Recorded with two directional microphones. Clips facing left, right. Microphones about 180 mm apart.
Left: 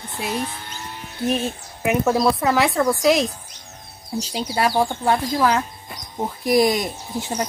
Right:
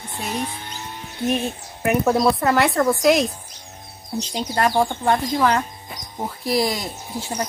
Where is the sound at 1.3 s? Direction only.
Centre (ahead or behind).